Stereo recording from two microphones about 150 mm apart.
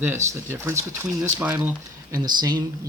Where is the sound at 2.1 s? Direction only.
25° right (ahead or behind).